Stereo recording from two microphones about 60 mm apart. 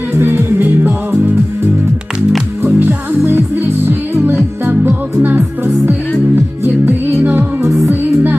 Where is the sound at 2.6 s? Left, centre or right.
Right.